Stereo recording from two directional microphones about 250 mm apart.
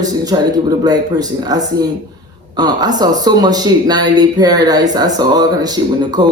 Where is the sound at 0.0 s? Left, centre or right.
Centre.